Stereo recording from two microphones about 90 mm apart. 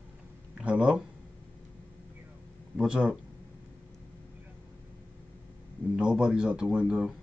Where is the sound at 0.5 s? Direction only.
15° right (ahead or behind).